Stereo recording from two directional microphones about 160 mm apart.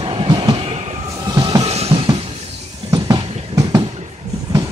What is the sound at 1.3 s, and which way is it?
Music, 30° right (ahead or behind).